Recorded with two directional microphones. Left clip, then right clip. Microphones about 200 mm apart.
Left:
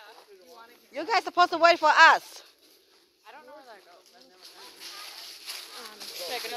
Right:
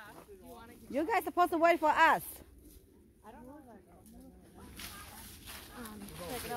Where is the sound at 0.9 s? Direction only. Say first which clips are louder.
Left 5 dB; centre (ahead or behind).